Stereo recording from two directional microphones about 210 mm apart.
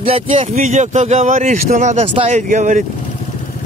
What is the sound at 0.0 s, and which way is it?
A man's voice, 25° right (ahead or behind).